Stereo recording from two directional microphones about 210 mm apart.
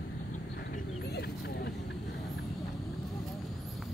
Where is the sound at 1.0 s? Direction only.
50° left (ahead or behind).